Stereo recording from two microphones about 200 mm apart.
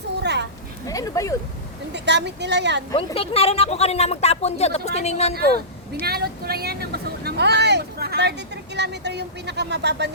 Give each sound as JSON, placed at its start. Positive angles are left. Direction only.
{"t": 0.2, "sound": "children playing", "side_deg": -60}
{"t": 0.9, "sound": "a sound", "side_deg": 15}
{"t": 1.9, "sound": "speech", "side_deg": -60}
{"t": 2.9, "sound": "speech", "side_deg": 30}
{"t": 6.1, "sound": "speech", "side_deg": -50}